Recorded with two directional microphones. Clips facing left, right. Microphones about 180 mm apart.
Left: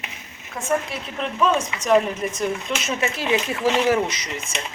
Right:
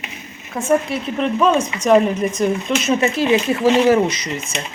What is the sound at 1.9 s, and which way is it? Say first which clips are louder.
Speech: right 5 dB; 40° right (ahead or behind).